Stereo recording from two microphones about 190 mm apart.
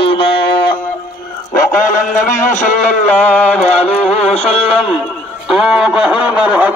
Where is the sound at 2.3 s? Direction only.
40° left (ahead or behind).